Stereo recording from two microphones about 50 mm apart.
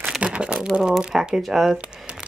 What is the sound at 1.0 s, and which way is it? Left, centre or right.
Speech, centre.